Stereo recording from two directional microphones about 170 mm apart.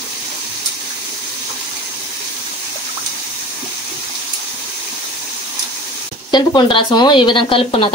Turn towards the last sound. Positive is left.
turn(degrees=30)  # may be behind; listen again after turning